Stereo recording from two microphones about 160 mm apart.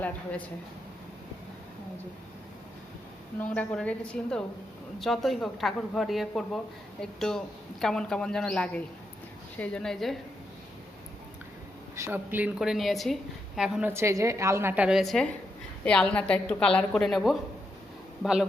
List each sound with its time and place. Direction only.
0.0 s a woman's voice: 10° left (ahead or behind)
3.4 s a woman's voice: 10° left (ahead or behind)
11.9 s speech: 15° right (ahead or behind)
13.9 s a woman's voice: 20° right (ahead or behind)